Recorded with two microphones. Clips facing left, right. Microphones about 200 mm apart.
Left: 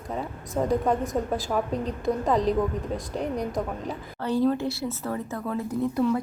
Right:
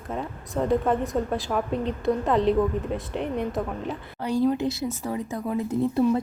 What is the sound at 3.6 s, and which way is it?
A woman's voice, centre (ahead or behind).